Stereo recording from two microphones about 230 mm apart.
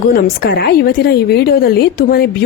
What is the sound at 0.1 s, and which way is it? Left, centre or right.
A woman's voice, left.